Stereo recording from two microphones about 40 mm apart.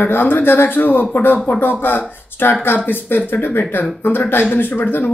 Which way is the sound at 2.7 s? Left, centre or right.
Left.